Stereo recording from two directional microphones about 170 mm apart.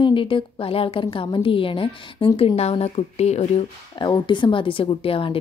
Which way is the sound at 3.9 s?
25° left (ahead or behind).